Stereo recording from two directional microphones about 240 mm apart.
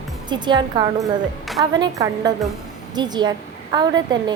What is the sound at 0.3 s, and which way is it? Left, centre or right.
A woman's voice, centre.